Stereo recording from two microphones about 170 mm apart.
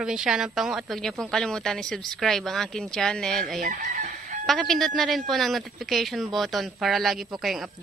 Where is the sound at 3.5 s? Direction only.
50° right (ahead or behind).